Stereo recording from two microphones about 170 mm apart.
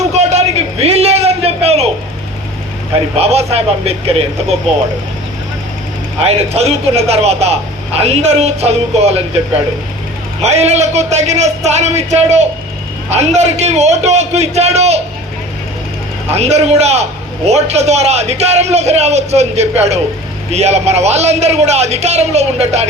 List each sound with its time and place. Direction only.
0.1 s a sound: 40° right (ahead or behind)
3.2 s a man's voice: 40° right (ahead or behind)
6.1 s a man's voice: 40° right (ahead or behind)
10.4 s a man's voice: 40° right (ahead or behind)
16.3 s a man's voice: 40° right (ahead or behind)